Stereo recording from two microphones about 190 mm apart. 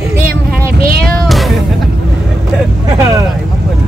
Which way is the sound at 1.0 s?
Centre (ahead or behind).